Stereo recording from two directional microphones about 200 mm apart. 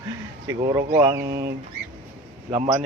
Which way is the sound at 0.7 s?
15° right (ahead or behind).